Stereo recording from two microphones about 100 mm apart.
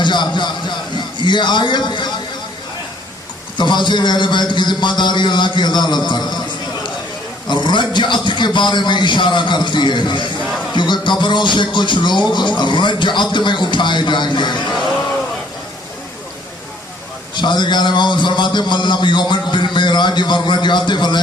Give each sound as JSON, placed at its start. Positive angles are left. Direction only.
{"t": 0.0, "sound": "a sound", "side_deg": 50}
{"t": 1.2, "sound": "speech", "side_deg": 50}
{"t": 3.6, "sound": "speech", "side_deg": 50}
{"t": 7.4, "sound": "speech", "side_deg": 50}
{"t": 17.3, "sound": "speech", "side_deg": 50}